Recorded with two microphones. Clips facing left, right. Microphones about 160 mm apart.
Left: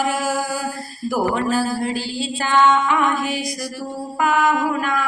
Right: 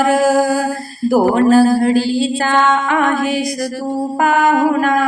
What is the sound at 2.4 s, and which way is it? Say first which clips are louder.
Music: left 2 dB; 50° right (ahead or behind).